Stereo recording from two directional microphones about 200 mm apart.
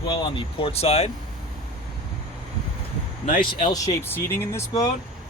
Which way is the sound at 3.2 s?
40° left (ahead or behind).